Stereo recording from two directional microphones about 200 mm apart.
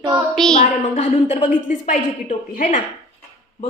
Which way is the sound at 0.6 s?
35° left (ahead or behind).